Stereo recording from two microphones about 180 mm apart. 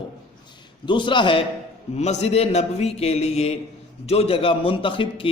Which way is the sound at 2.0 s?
40° left (ahead or behind).